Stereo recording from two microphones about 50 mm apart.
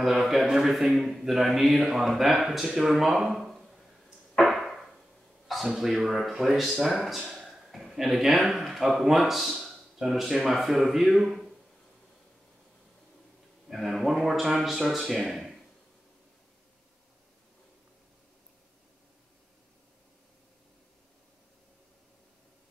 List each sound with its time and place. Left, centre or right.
0.0 s a man's voice: centre
3.3 s a sound: centre
5.5 s speech: centre
13.7 s a man's voice: centre